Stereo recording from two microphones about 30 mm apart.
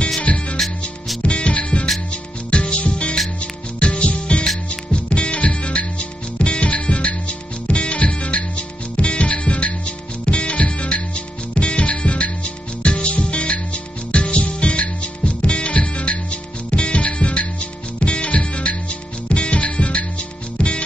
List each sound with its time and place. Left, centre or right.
0.2 s music: left
2.5 s music: left